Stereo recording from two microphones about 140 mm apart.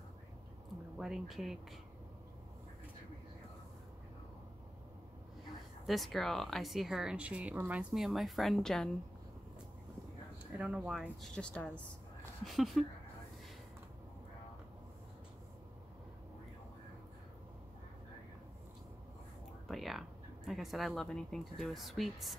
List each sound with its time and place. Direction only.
0.9 s speech: 5° right (ahead or behind)
5.9 s speech: centre (ahead or behind)
10.4 s speech: 10° right (ahead or behind)
19.7 s speech: centre (ahead or behind)